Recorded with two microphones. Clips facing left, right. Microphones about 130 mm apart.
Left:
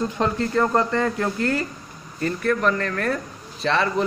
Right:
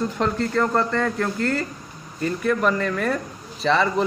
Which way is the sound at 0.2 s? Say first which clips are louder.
Left 1 dB; 15° left (ahead or behind).